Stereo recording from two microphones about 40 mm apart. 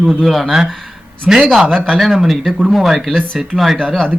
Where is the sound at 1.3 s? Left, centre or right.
Centre.